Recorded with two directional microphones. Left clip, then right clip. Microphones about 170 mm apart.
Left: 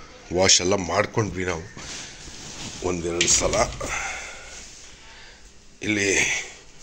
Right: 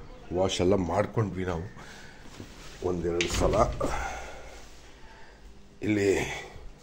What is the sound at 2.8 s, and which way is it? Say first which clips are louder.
Speech: left 4 dB; 30° left (ahead or behind).